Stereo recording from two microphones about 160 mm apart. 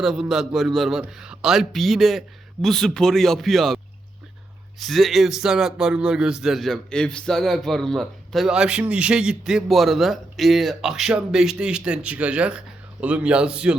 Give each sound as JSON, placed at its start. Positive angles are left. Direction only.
{"t": 0.0, "sound": "a man's voice", "side_deg": 0}
{"t": 4.8, "sound": "a man's voice", "side_deg": 0}